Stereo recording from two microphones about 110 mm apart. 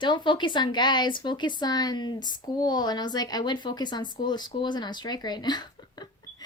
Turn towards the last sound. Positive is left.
turn(degrees=40)  # may be behind; listen again after turning